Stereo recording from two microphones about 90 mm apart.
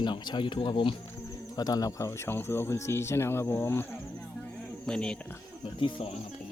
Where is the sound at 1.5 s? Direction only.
45° left (ahead or behind); by 3.8 s 30° left (ahead or behind).